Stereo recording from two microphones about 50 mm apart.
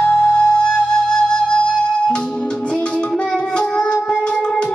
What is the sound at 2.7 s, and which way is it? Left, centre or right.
Music, centre.